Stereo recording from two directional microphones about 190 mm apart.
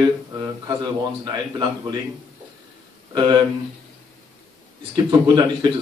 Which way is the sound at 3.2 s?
25° right (ahead or behind).